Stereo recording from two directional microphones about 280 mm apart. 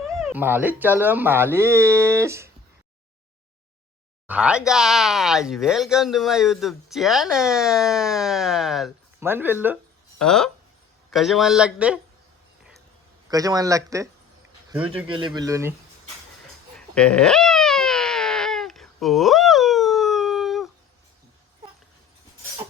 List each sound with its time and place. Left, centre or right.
0.1 s speech: centre
4.3 s speech: centre
13.3 s speech: centre
16.7 s a sound: centre